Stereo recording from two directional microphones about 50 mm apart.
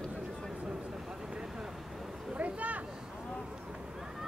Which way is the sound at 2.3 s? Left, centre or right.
Right.